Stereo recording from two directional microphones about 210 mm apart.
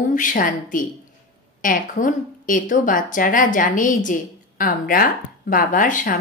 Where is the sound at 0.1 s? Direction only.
40° left (ahead or behind).